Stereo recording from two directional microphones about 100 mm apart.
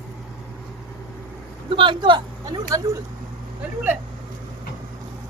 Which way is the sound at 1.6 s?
55° right (ahead or behind).